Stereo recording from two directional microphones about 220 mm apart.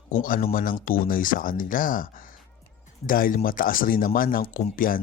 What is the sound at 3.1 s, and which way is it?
Speech, 40° left (ahead or behind).